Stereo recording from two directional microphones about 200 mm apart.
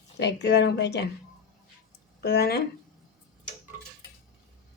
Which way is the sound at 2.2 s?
55° left (ahead or behind).